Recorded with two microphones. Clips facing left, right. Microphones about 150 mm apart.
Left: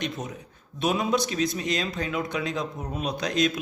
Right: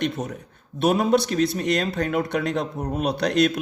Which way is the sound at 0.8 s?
60° right (ahead or behind).